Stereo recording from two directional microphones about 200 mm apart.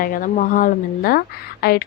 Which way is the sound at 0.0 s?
45° left (ahead or behind).